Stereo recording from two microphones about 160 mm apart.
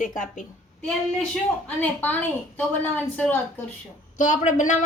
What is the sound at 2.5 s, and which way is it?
Speech, 10° left (ahead or behind).